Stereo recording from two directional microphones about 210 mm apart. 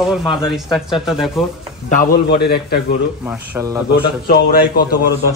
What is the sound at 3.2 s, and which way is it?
Speech, 10° right (ahead or behind).